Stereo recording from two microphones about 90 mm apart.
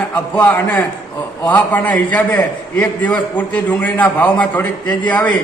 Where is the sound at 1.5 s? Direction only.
15° left (ahead or behind).